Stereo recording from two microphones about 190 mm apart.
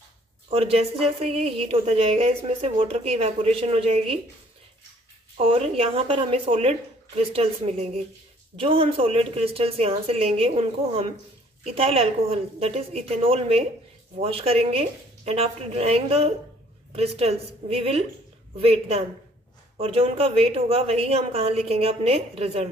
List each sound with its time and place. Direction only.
0.5 s speech: 30° right (ahead or behind)
5.4 s speech: 30° right (ahead or behind)